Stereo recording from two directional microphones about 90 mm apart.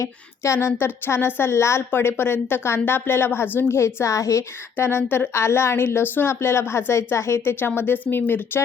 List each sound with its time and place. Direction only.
0.0 s speech: 30° left (ahead or behind)